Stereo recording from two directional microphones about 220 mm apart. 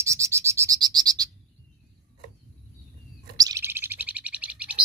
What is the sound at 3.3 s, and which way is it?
Bird, 15° right (ahead or behind).